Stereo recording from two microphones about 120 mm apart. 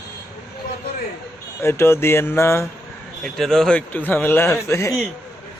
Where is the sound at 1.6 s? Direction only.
20° left (ahead or behind).